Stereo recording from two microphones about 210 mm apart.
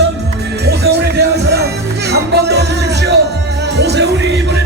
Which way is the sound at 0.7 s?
50° right (ahead or behind).